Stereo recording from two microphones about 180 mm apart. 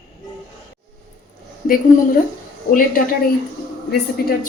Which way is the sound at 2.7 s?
50° left (ahead or behind).